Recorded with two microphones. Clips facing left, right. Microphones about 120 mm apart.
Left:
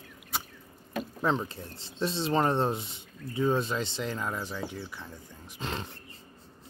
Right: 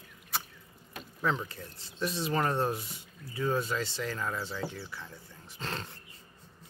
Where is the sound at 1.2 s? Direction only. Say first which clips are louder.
Left 2 dB; 25° left (ahead or behind).